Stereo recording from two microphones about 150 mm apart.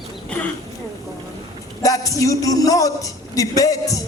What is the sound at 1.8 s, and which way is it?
Speech, 20° left (ahead or behind).